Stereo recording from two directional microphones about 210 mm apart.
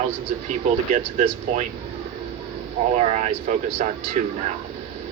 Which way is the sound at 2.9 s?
35° right (ahead or behind).